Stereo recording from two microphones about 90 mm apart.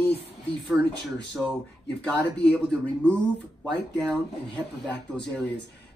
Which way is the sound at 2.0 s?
10° left (ahead or behind).